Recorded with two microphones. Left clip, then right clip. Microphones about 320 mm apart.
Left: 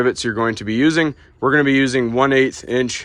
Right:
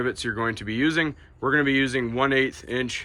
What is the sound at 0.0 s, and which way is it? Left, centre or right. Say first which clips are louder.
Speech: left 8 dB; centre.